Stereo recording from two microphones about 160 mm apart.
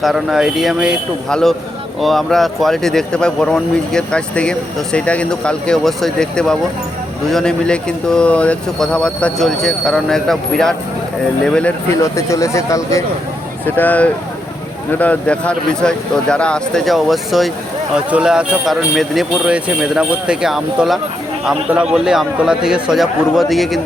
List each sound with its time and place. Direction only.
0.0 s speech: centre (ahead or behind)